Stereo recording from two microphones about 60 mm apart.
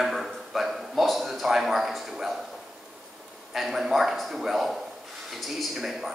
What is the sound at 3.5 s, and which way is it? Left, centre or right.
Speech, centre.